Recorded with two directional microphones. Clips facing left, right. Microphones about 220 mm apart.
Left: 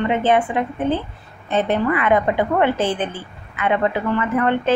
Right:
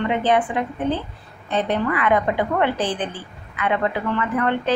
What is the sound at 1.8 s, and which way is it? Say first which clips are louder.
A woman's voice: left 2 dB; 25° left (ahead or behind).